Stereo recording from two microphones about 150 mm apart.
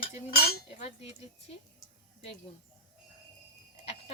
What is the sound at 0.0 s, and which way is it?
Cutlery, 85° left.